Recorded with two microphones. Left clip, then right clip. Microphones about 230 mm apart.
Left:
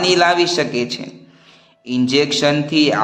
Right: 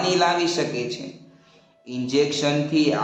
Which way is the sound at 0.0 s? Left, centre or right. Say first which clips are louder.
Left 6 dB; left.